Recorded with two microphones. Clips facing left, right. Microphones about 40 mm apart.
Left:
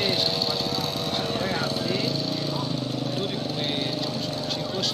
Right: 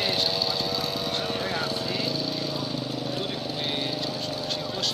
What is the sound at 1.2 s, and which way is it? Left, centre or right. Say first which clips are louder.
Lawn mower: left 2 dB; centre.